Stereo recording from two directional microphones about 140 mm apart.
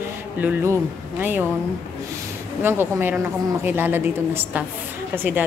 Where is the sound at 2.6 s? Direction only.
15° right (ahead or behind).